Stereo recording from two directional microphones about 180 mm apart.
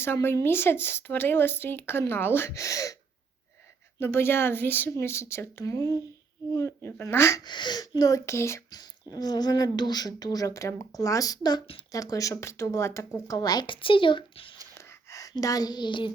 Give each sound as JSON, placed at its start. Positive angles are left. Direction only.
{"t": 0.0, "sound": "speech", "side_deg": 15}
{"t": 4.0, "sound": "speech", "side_deg": 15}
{"t": 14.8, "sound": "a sound", "side_deg": 15}